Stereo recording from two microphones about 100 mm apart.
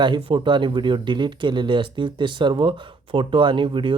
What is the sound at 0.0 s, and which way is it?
Speech, 50° right (ahead or behind).